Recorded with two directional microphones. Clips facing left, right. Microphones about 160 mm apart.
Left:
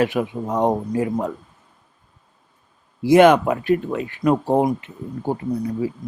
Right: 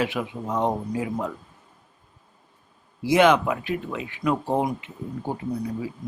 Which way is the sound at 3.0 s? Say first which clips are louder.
Left 6 dB; 50° left (ahead or behind).